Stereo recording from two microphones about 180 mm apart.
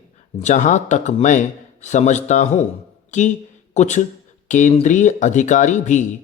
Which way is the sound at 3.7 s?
40° left (ahead or behind).